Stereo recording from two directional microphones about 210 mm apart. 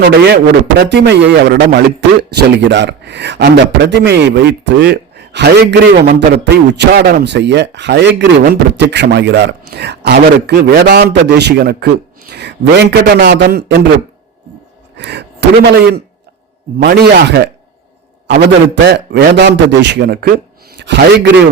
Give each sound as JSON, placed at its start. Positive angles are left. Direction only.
{"t": 0.8, "sound": "a man's voice", "side_deg": -55}
{"t": 14.9, "sound": "a man's voice", "side_deg": -55}